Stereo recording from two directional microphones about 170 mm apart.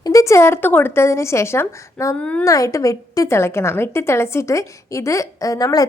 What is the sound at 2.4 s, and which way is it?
A woman's voice, 20° left (ahead or behind).